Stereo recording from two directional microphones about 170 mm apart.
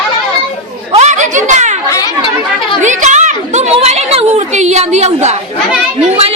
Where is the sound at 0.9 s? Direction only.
45° right (ahead or behind).